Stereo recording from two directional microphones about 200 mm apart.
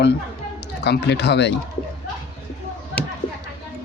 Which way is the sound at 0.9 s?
55° left (ahead or behind).